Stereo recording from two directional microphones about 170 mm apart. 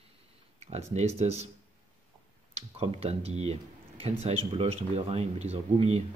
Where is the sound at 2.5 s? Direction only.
35° right (ahead or behind).